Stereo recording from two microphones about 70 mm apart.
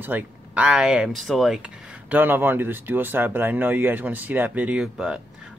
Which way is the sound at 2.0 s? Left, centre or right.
Right.